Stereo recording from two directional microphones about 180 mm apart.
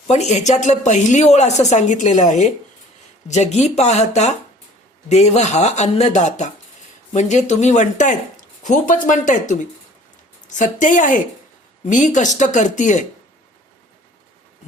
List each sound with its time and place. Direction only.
0.1 s a woman's voice: 40° left (ahead or behind)
10.6 s speech: 45° left (ahead or behind)